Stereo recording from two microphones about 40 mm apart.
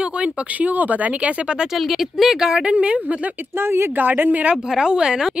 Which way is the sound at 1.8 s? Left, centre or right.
Centre.